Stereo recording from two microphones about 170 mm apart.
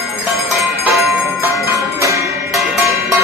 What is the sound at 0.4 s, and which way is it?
Bell, centre (ahead or behind).